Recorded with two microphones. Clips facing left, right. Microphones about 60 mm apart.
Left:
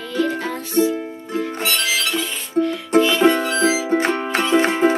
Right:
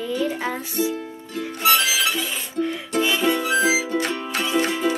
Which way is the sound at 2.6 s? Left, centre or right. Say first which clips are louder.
Left 7 dB; left.